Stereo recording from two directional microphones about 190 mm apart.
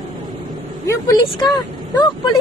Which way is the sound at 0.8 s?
20° left (ahead or behind).